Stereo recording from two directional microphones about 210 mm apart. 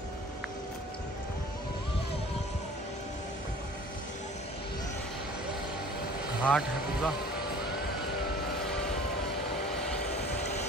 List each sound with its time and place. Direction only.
6.4 s speech: 5° left (ahead or behind)